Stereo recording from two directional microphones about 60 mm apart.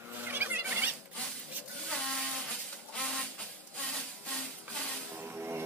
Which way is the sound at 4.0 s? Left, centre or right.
Centre.